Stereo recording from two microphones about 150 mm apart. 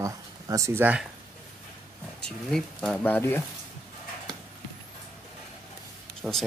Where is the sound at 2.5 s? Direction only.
5° left (ahead or behind).